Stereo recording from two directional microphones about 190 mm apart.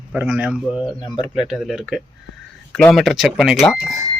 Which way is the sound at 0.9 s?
25° left (ahead or behind).